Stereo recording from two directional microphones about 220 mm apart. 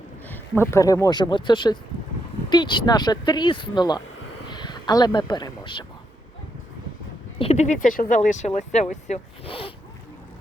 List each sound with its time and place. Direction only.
0.3 s speech: 10° left (ahead or behind)
7.3 s speech: 30° left (ahead or behind)